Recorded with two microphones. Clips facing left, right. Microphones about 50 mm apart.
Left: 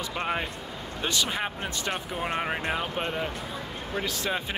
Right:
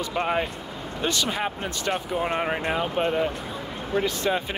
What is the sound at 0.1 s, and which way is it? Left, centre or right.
Speech, centre.